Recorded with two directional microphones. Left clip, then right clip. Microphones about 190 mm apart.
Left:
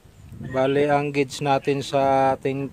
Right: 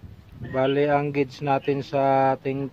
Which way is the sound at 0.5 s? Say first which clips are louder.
Left 1 dB; 45° left (ahead or behind).